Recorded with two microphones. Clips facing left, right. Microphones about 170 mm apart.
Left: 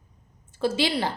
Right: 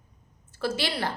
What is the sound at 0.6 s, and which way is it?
Speech, 20° left (ahead or behind).